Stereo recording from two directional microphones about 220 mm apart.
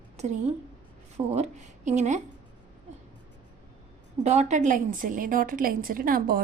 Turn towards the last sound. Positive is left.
turn(degrees=-40)  # may be behind; listen again after turning